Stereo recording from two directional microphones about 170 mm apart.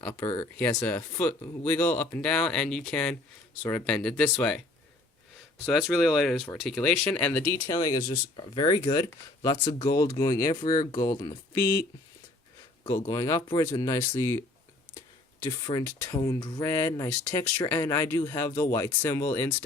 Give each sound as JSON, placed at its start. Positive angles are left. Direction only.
{"t": 0.1, "sound": "speech", "side_deg": 15}
{"t": 5.6, "sound": "speech", "side_deg": 0}
{"t": 7.7, "sound": "speech", "side_deg": 25}
{"t": 11.6, "sound": "speech", "side_deg": 60}
{"t": 12.9, "sound": "speech", "side_deg": 20}
{"t": 15.4, "sound": "speech", "side_deg": 20}